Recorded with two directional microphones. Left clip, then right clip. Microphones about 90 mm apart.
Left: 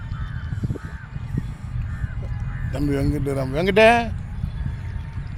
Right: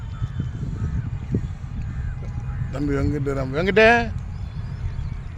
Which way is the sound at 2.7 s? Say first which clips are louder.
Left 1 dB; 30° left (ahead or behind).